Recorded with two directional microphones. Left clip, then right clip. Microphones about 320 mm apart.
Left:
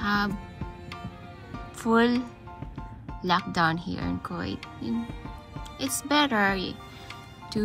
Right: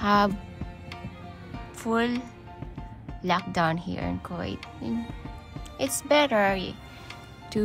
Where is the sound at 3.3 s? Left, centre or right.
Centre.